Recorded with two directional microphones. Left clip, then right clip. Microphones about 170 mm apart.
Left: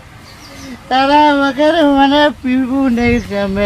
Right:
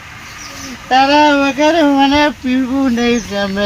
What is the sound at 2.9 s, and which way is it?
Speech, 40° left (ahead or behind).